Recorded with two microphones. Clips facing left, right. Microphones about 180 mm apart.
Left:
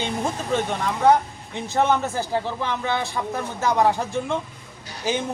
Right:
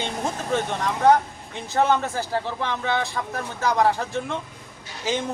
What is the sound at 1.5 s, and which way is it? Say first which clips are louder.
Speech: even; 15° left (ahead or behind).